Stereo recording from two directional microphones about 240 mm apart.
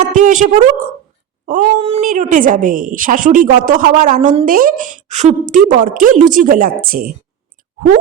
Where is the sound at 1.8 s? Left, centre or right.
Right.